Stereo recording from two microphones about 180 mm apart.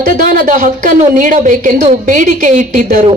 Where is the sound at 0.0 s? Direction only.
50° right (ahead or behind).